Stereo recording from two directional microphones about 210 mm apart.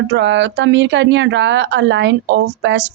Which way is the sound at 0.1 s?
60° right (ahead or behind).